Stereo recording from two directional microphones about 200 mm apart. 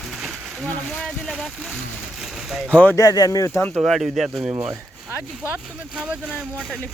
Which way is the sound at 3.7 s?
5° right (ahead or behind).